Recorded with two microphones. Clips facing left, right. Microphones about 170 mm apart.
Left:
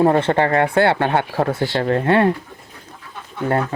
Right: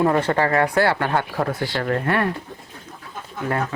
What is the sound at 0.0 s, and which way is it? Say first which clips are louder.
Speech: left 3 dB; 30° left (ahead or behind).